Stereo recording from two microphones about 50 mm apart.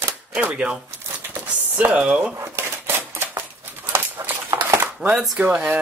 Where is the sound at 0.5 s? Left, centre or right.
Centre.